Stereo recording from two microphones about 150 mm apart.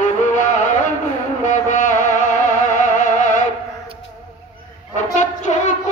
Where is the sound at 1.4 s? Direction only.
55° left (ahead or behind).